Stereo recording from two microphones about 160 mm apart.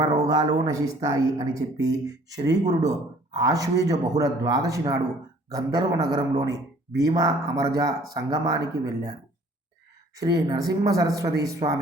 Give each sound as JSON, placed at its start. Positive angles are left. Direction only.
{"t": 0.0, "sound": "a woman's voice", "side_deg": -25}
{"t": 10.2, "sound": "a woman's voice", "side_deg": -25}